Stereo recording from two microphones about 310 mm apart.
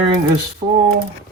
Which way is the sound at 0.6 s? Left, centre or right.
Right.